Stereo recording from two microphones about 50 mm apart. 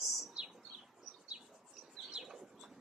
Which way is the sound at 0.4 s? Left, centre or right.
Centre.